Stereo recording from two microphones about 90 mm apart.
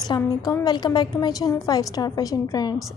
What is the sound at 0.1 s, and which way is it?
A woman's voice, 45° left (ahead or behind).